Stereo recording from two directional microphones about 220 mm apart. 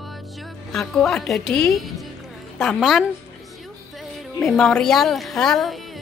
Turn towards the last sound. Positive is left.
turn(degrees=0)  # may be behind; listen again after turning